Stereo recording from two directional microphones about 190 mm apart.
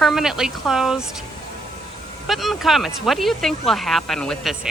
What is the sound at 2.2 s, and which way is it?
Speech, centre (ahead or behind).